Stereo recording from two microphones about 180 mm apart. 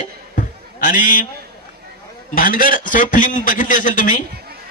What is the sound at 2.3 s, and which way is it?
A man's voice, 50° left (ahead or behind).